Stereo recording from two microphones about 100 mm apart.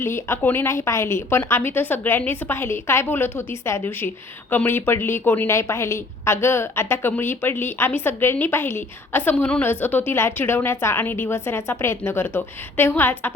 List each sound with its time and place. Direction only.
0.0 s a woman's voice: 25° left (ahead or behind)